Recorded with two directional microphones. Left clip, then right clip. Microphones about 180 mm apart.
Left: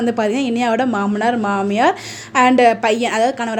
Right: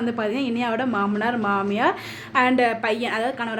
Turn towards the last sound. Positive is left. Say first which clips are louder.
# left 7 dB
turn(degrees=35)  # may be behind; listen again after turning